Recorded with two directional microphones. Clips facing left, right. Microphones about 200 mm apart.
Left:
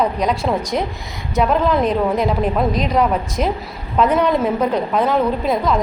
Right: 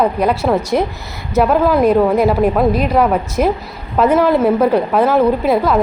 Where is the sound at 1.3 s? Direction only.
5° right (ahead or behind).